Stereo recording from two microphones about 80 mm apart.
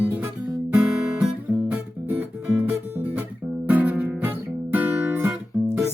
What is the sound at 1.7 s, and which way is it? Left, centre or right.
Music, centre.